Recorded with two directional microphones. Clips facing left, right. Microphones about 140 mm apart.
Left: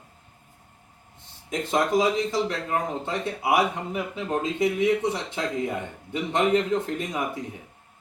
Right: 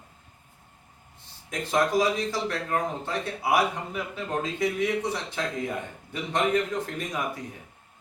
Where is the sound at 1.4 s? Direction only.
20° left (ahead or behind).